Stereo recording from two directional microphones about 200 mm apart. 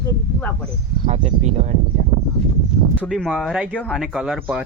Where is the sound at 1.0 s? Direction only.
35° right (ahead or behind).